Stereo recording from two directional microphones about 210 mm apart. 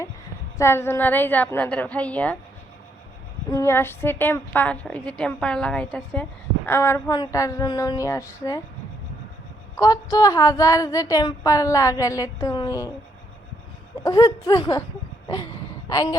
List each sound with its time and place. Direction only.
0.6 s a woman's voice: 10° left (ahead or behind)
3.5 s a woman's voice: 10° left (ahead or behind)
9.7 s a woman's voice: 15° left (ahead or behind)
14.0 s a woman's voice: 15° left (ahead or behind)
15.9 s a woman's voice: 15° left (ahead or behind)